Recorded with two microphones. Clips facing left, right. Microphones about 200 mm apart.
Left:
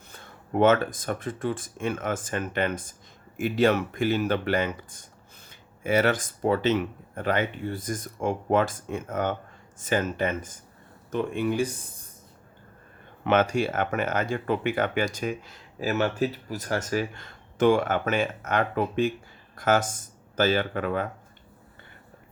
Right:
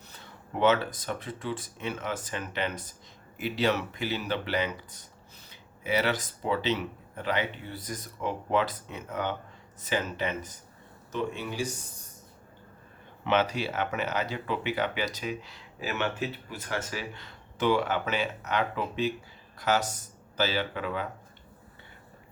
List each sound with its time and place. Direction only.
0.1 s speech: 50° left (ahead or behind)
13.2 s speech: 50° left (ahead or behind)